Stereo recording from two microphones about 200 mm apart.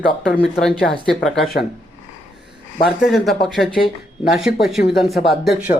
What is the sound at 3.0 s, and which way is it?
Speech, centre (ahead or behind).